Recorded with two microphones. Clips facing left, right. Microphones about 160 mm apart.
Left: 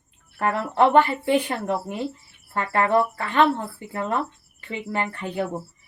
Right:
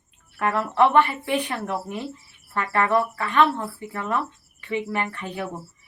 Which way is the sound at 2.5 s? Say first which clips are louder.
Left 1 dB; 30° left (ahead or behind).